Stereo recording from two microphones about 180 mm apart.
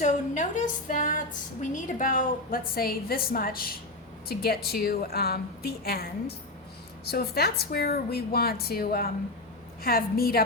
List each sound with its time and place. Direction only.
0.0 s a woman's voice: 45° left (ahead or behind)